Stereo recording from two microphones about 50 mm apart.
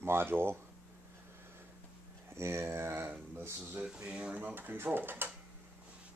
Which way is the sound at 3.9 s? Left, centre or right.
Right.